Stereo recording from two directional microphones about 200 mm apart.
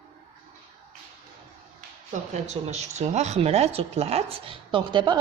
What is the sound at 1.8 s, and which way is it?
Speech, 35° right (ahead or behind).